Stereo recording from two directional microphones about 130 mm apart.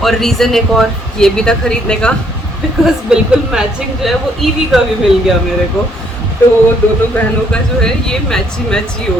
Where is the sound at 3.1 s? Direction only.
5° right (ahead or behind).